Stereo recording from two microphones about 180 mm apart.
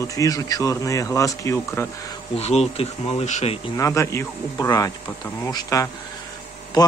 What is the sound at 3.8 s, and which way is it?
Speech, 15° left (ahead or behind).